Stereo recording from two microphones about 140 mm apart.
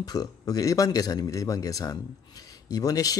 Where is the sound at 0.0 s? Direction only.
25° left (ahead or behind).